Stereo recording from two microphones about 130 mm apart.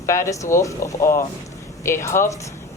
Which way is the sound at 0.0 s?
25° left (ahead or behind).